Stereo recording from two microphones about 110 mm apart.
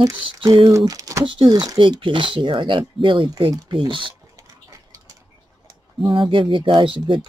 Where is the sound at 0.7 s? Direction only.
30° right (ahead or behind).